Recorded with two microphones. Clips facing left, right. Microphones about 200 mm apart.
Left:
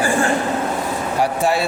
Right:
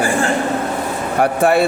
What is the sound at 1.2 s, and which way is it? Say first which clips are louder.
Speech: right 5 dB; 55° right (ahead or behind).